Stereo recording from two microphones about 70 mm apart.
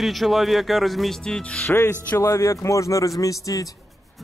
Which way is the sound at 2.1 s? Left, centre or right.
Left.